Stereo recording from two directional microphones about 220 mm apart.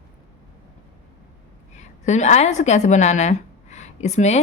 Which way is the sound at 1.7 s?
30° left (ahead or behind).